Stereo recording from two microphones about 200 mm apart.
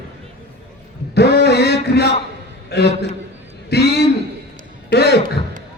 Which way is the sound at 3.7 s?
55° left (ahead or behind).